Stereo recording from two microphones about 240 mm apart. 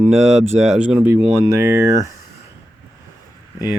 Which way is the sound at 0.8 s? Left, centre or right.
Centre.